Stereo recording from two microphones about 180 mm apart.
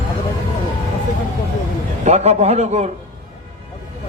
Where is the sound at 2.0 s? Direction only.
35° right (ahead or behind).